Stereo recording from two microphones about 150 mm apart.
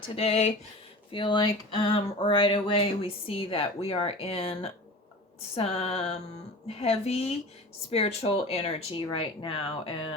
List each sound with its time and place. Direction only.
0.2 s speech: 45° left (ahead or behind)
1.1 s speech: 35° left (ahead or behind)